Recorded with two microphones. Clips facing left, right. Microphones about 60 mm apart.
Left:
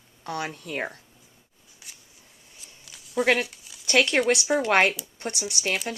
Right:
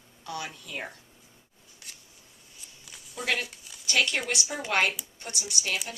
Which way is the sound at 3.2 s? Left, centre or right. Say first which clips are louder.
Left 7 dB; left.